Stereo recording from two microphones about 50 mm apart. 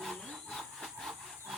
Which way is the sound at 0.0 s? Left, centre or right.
Centre.